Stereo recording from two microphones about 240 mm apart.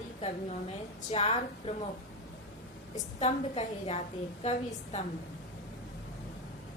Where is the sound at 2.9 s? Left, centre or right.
Left.